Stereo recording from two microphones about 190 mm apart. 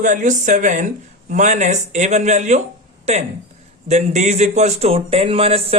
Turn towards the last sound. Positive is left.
turn(degrees=-30)  # may be behind; listen again after turning